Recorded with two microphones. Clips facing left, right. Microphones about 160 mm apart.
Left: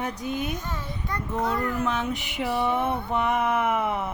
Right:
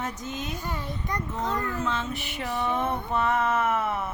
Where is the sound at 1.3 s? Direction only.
10° left (ahead or behind).